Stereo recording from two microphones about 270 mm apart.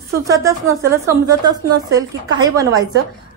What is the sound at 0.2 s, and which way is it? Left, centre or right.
A woman's voice, centre.